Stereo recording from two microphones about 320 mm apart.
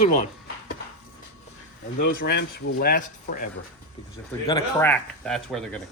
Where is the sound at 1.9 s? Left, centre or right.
Left.